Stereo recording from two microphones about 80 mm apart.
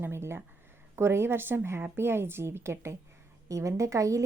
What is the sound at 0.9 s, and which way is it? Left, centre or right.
A woman's voice, right.